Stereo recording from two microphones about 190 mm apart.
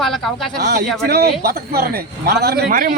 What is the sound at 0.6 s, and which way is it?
A man's voice, 55° right (ahead or behind).